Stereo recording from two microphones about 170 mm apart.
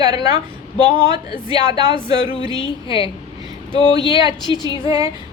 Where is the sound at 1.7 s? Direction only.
30° right (ahead or behind).